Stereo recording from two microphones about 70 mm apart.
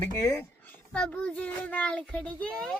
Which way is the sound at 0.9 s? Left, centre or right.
Centre.